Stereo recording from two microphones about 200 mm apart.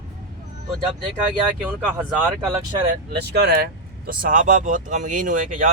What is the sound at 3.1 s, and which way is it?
Speech, 55° right (ahead or behind).